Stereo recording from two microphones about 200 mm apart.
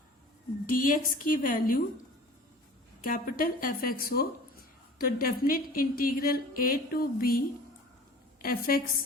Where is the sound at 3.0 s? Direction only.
45° left (ahead or behind).